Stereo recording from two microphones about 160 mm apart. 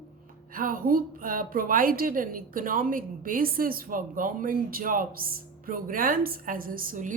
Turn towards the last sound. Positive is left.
turn(degrees=-55)  # may be behind; listen again after turning